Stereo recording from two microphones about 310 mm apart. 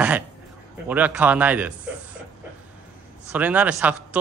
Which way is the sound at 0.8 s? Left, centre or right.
Centre.